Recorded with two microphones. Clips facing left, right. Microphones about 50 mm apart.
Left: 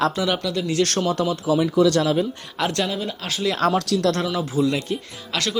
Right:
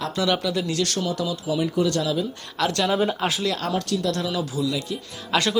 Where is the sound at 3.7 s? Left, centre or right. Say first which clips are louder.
Left 4 dB; left.